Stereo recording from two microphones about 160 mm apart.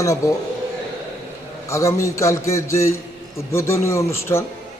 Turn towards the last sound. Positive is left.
turn(degrees=15)  # may be behind; listen again after turning